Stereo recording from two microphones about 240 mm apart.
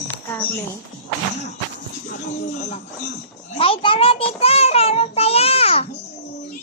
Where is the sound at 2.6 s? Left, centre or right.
Left.